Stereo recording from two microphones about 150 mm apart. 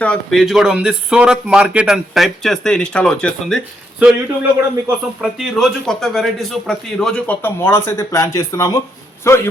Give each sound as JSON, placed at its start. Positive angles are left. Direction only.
{"t": 0.0, "sound": "speech", "side_deg": 5}
{"t": 4.0, "sound": "a man's voice", "side_deg": -10}